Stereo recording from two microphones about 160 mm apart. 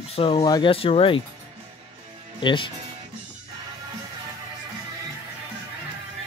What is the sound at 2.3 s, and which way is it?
Speech, 30° left (ahead or behind).